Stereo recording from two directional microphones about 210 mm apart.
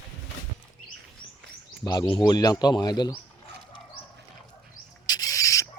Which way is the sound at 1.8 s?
15° left (ahead or behind).